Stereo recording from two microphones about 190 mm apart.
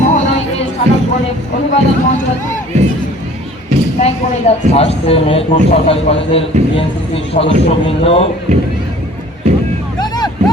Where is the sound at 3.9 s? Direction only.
35° left (ahead or behind).